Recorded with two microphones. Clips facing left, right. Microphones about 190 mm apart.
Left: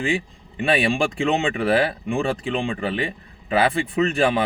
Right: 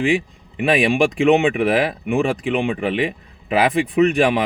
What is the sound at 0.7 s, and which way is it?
Speech, 15° right (ahead or behind).